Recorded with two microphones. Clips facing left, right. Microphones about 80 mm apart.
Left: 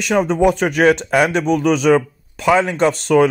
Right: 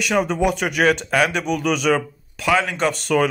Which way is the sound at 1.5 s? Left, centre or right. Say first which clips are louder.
Left 6 dB; left.